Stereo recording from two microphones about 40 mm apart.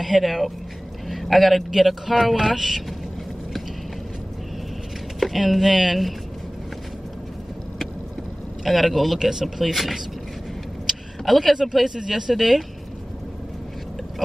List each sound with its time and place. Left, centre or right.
0.0 s speech: centre
1.0 s vehicle: centre
1.7 s speech: centre
5.2 s speech: centre
8.6 s speech: centre